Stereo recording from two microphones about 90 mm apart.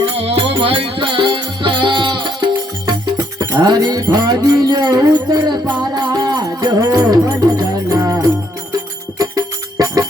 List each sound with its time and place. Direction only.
0.0 s music: 90° right; by 2.5 s 60° right (ahead or behind)
3.3 s a sound: 45° right (ahead or behind)
6.0 s music: 50° right (ahead or behind)